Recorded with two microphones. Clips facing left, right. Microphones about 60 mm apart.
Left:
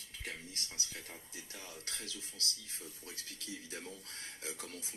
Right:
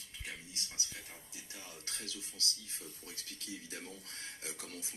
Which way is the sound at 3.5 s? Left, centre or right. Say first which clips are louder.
Left 1 dB; left.